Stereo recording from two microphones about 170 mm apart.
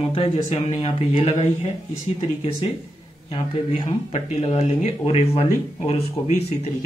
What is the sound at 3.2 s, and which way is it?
A man's voice, 30° left (ahead or behind).